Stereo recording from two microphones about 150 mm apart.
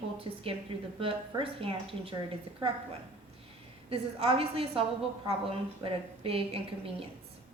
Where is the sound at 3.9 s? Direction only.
40° right (ahead or behind).